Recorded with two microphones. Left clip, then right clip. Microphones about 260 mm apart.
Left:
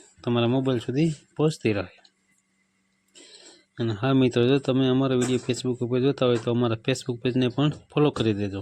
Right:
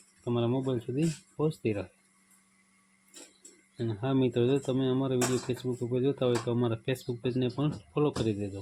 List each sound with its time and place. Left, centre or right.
0.3 s speech: left
3.8 s speech: left